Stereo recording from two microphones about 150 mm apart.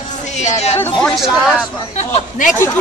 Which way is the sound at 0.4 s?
50° left (ahead or behind).